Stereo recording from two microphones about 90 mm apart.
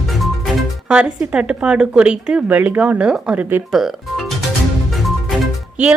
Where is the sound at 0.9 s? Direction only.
10° right (ahead or behind).